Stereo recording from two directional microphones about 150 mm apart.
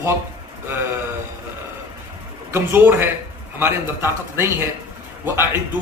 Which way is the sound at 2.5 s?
15° right (ahead or behind).